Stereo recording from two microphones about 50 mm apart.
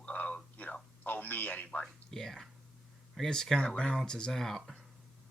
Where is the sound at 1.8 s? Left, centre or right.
Centre.